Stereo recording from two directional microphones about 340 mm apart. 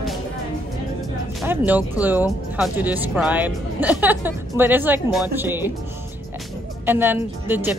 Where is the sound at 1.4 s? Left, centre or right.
Centre.